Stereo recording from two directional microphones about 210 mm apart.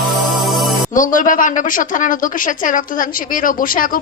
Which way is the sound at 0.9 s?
40° left (ahead or behind).